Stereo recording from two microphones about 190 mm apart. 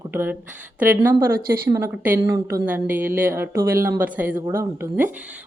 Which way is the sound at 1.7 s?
10° right (ahead or behind).